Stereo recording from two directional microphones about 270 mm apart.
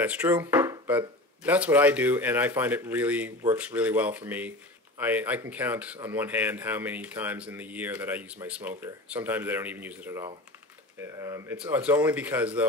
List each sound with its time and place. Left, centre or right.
0.0 s speech: centre